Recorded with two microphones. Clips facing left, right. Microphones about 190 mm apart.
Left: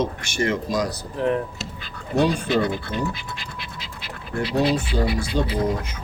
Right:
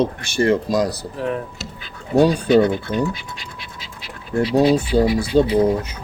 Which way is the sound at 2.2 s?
40° right (ahead or behind).